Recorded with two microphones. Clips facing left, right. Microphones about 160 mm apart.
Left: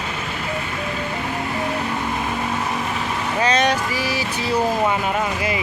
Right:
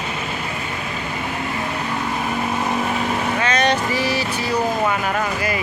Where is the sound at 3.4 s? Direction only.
35° left (ahead or behind).